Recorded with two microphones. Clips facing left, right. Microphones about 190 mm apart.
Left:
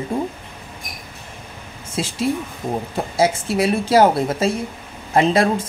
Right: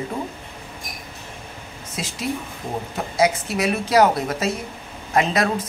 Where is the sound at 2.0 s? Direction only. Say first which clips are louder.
Left 6 dB; 30° left (ahead or behind).